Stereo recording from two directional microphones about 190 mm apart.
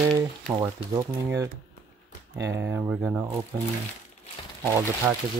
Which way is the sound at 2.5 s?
10° right (ahead or behind).